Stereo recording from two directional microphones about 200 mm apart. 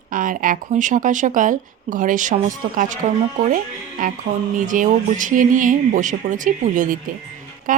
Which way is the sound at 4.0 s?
45° right (ahead or behind).